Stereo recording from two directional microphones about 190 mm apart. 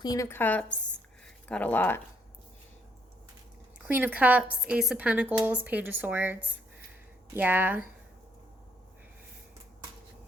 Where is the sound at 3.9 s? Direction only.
10° right (ahead or behind).